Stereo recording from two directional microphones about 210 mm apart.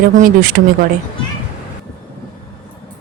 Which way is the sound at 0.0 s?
40° right (ahead or behind).